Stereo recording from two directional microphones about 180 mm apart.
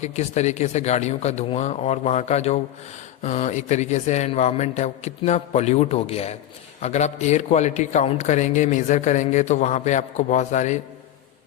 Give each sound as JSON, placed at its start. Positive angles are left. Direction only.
{"t": 0.0, "sound": "a man's voice", "side_deg": 40}